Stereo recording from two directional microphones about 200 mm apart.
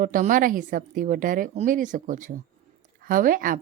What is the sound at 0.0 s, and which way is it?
A woman's voice, 40° right (ahead or behind).